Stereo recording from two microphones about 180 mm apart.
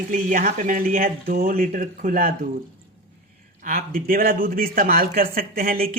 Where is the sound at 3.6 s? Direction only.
55° right (ahead or behind).